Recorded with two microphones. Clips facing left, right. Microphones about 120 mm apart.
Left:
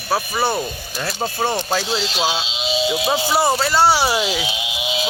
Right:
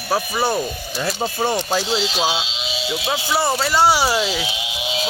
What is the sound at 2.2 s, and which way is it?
Speech, 15° right (ahead or behind).